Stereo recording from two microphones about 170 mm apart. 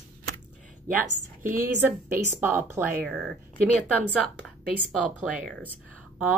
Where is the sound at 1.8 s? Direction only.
15° right (ahead or behind).